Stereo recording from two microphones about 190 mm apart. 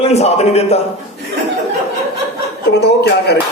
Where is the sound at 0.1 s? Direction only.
35° left (ahead or behind).